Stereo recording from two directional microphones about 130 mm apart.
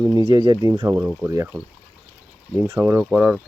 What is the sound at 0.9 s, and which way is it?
Speech, 15° right (ahead or behind).